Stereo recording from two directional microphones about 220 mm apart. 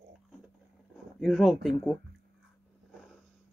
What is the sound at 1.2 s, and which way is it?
Speech, centre (ahead or behind).